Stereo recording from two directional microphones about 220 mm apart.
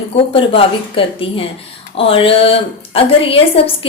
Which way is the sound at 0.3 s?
25° left (ahead or behind).